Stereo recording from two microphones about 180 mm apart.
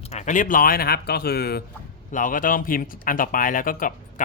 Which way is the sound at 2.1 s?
45° left (ahead or behind).